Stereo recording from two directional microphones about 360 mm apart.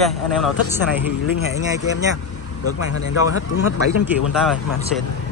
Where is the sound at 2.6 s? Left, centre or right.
Left.